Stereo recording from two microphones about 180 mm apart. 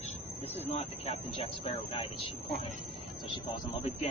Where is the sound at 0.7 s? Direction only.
35° left (ahead or behind).